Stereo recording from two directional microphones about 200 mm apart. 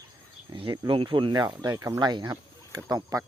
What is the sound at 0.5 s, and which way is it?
Speech, 25° right (ahead or behind).